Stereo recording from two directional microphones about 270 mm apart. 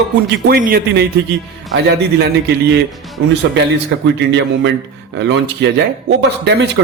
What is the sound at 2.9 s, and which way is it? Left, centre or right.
Music, centre.